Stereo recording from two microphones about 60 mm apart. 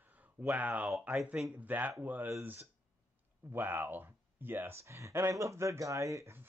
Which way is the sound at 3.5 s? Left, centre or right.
Right.